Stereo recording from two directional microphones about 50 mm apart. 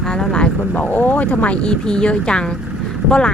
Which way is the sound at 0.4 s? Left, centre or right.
Left.